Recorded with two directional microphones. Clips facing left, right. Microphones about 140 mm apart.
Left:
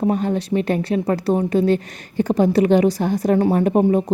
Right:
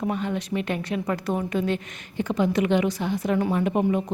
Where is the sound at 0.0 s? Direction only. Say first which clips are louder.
Left 7 dB; 35° left (ahead or behind).